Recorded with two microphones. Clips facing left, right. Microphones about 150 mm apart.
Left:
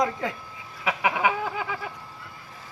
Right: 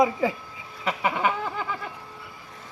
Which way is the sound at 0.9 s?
5° left (ahead or behind).